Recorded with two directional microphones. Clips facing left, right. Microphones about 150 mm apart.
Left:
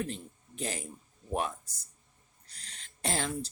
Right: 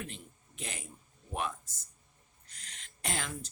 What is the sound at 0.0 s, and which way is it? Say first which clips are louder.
A man's voice: left 8 dB; 35° left (ahead or behind).